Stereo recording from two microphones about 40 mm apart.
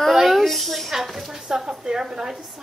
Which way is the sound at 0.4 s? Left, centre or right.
Centre.